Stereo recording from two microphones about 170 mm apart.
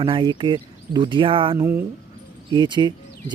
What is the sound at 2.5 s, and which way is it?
Speech, 25° right (ahead or behind).